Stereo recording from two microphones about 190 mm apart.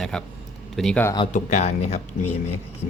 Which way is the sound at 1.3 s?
40° left (ahead or behind).